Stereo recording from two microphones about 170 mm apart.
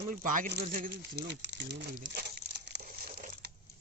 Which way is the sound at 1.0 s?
90° right.